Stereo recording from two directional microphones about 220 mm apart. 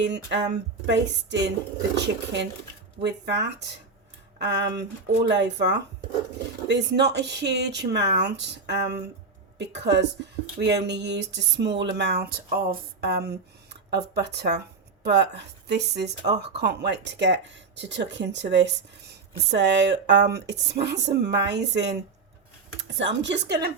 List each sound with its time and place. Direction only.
0.0 s speech: 55° right (ahead or behind)